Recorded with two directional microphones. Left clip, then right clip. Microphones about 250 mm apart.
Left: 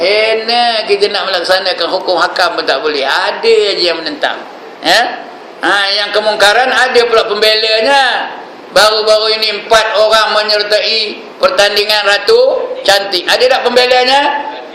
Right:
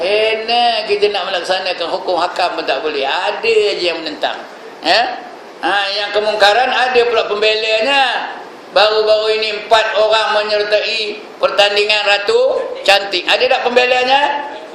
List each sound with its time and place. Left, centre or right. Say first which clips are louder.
0.0 s a man's voice: left 4 dB; left
5.6 s a man's voice: left 5 dB; left